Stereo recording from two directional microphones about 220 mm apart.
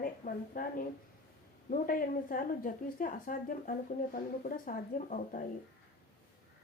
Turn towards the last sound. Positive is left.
turn(degrees=35)  # may be behind; listen again after turning